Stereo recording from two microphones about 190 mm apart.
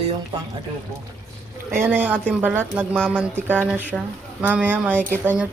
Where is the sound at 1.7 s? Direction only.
10° right (ahead or behind).